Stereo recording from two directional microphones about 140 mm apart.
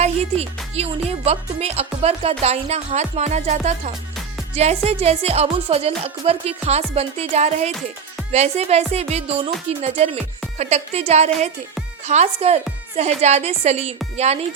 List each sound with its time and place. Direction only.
0.0 s speech: 50° right (ahead or behind)